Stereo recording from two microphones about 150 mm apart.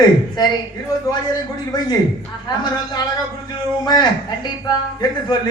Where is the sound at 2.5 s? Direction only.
25° left (ahead or behind).